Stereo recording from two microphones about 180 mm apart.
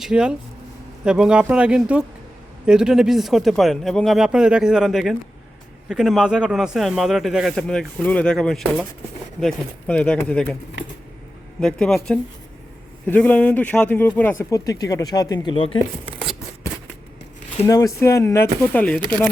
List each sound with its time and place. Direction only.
0.0 s a man's voice: 5° right (ahead or behind)
11.6 s a man's voice: 5° left (ahead or behind); by 15.8 s 30° left (ahead or behind)
17.6 s speech: 20° left (ahead or behind)